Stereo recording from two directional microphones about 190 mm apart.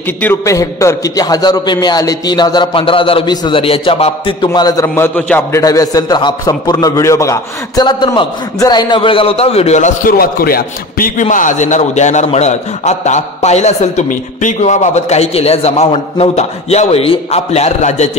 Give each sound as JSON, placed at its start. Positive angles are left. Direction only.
{"t": 0.2, "sound": "a man's voice", "side_deg": 15}